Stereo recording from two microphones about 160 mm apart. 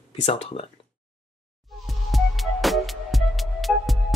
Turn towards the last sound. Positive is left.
turn(degrees=0)  # may be behind; listen again after turning